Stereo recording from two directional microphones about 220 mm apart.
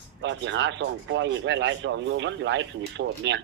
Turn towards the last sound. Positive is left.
turn(degrees=-55)  # may be behind; listen again after turning